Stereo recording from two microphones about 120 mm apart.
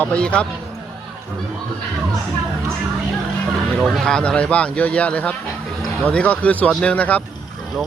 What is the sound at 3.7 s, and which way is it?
Speech, centre (ahead or behind).